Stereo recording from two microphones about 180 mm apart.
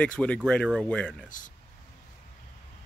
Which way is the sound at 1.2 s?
45° left (ahead or behind).